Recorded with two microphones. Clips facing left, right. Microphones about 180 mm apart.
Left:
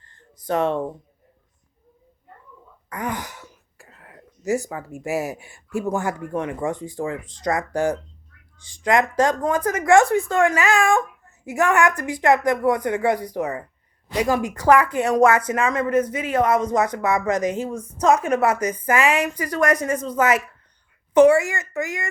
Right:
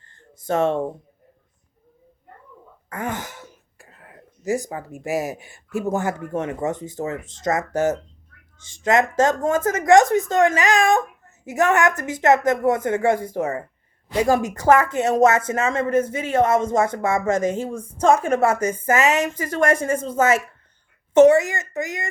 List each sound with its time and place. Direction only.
0.3 s speech: 25° right (ahead or behind)
2.9 s speech: 25° right (ahead or behind)
3.8 s whispering: 35° right (ahead or behind)
4.4 s speech: 15° right (ahead or behind)